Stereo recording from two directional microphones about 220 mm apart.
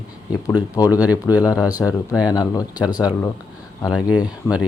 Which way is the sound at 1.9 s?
5° right (ahead or behind).